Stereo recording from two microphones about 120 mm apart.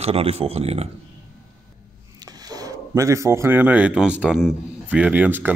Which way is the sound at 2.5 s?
30° right (ahead or behind).